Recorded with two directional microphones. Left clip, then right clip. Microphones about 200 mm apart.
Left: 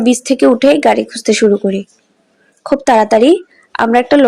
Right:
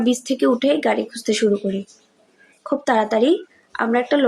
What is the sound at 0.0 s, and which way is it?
Speech, 40° left (ahead or behind).